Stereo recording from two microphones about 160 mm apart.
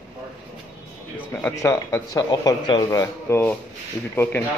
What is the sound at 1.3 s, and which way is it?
Speech, 15° left (ahead or behind).